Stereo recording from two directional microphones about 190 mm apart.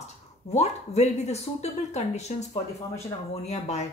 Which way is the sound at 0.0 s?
35° left (ahead or behind).